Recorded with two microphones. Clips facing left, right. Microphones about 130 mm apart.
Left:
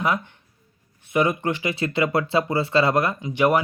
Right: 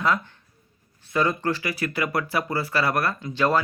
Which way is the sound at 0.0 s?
20° left (ahead or behind).